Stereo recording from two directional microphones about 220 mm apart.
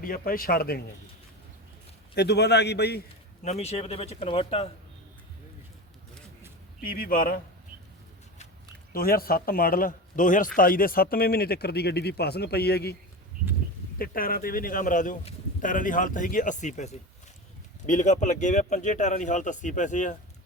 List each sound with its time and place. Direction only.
0.0 s speech: 40° left (ahead or behind)
2.1 s a man's voice: 50° left (ahead or behind)
3.4 s speech: 30° left (ahead or behind)
6.8 s speech: 40° left (ahead or behind)
8.9 s a man's voice: 45° left (ahead or behind)
14.0 s speech: 40° left (ahead or behind)